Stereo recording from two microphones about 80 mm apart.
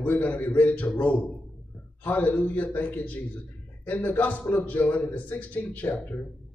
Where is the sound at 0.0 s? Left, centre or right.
Centre.